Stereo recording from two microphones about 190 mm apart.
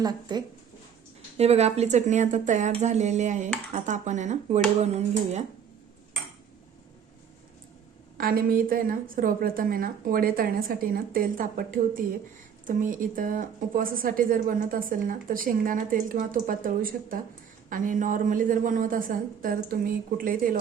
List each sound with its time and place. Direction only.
0.0 s speech: 20° right (ahead or behind)
1.4 s speech: 35° right (ahead or behind)
8.2 s a woman's voice: 50° right (ahead or behind)